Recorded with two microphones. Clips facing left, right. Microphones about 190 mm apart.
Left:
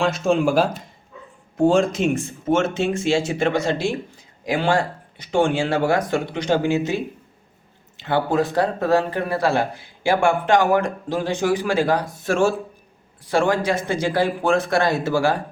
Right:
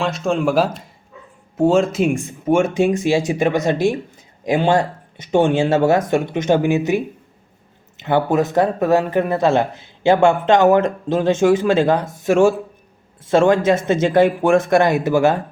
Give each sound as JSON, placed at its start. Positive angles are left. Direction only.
{"t": 0.0, "sound": "speech", "side_deg": 0}